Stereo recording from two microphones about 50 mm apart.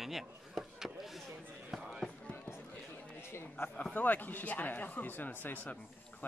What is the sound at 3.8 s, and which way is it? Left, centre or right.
Speech, left.